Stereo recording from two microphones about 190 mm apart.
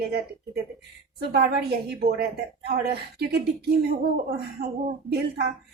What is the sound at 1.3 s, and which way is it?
A woman's voice, 55° right (ahead or behind).